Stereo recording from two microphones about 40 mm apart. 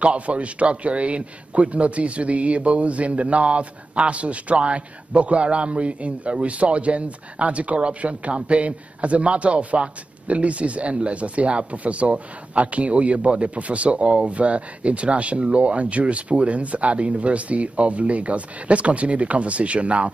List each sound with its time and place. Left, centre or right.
0.0 s speech: right